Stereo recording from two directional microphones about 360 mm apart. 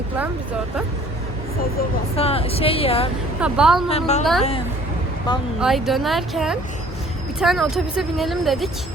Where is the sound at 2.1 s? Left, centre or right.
Centre.